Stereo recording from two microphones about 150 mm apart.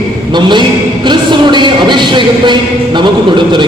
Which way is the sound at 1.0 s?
30° right (ahead or behind).